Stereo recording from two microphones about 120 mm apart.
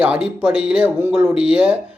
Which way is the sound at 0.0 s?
10° right (ahead or behind).